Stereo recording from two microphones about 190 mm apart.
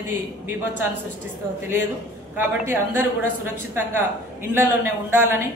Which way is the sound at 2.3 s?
10° right (ahead or behind).